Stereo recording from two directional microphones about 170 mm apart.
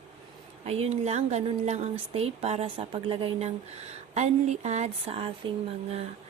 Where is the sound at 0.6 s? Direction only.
40° right (ahead or behind).